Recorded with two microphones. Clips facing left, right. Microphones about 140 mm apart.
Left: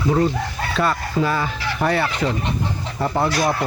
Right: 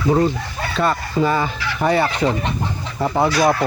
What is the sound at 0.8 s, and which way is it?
Speech, centre (ahead or behind).